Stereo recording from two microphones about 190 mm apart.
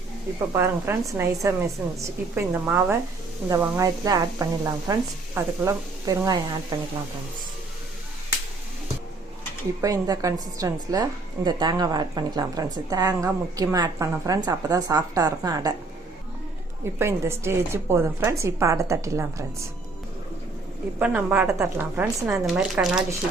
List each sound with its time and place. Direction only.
0.5 s a woman's voice: 15° right (ahead or behind)
9.8 s a woman's voice: 20° right (ahead or behind)
16.8 s a woman's voice: 15° right (ahead or behind)
21.0 s a woman's voice: 10° right (ahead or behind)